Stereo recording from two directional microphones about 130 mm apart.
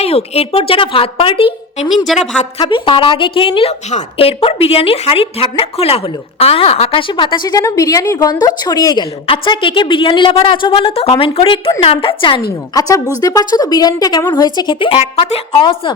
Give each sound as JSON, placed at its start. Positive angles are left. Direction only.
{"t": 0.0, "sound": "a woman's voice", "side_deg": 50}
{"t": 2.1, "sound": "a woman's voice", "side_deg": 0}
{"t": 2.6, "sound": "a woman's voice", "side_deg": 40}
{"t": 9.2, "sound": "a woman's voice", "side_deg": 45}
{"t": 12.7, "sound": "a woman's voice", "side_deg": 25}